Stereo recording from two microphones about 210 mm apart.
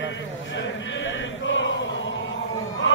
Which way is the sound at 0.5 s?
60° left (ahead or behind).